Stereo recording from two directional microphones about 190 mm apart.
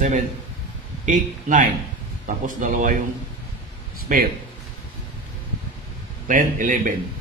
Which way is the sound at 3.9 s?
50° right (ahead or behind).